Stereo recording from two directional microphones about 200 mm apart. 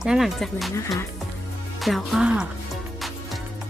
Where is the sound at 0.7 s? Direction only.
15° left (ahead or behind).